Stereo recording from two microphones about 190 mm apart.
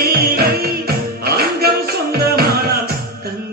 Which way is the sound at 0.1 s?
55° right (ahead or behind).